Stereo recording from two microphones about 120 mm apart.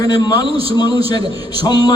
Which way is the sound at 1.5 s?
35° left (ahead or behind).